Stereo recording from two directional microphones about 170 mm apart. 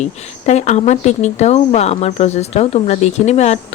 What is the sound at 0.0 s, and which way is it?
Speech, 45° left (ahead or behind).